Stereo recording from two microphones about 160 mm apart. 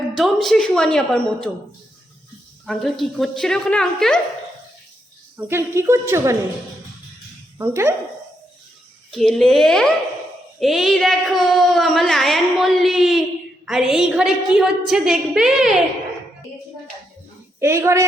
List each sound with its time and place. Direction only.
0.2 s a woman's voice: centre (ahead or behind)
2.6 s a woman's voice: centre (ahead or behind)
5.4 s speech: 15° right (ahead or behind)
7.6 s speech: 15° right (ahead or behind)
9.1 s a woman's voice: centre (ahead or behind)
17.6 s speech: 15° right (ahead or behind)